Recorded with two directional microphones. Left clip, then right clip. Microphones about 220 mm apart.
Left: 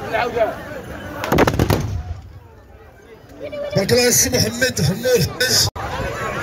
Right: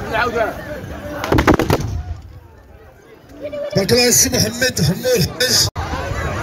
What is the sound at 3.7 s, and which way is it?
A man's voice, 50° right (ahead or behind).